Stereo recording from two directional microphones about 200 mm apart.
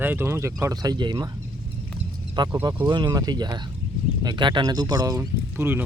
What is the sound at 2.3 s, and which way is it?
Speech, 20° right (ahead or behind).